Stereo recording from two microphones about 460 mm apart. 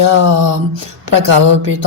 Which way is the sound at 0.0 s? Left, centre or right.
Right.